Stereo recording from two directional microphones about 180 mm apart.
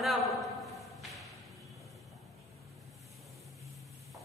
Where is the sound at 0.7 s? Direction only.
Centre (ahead or behind).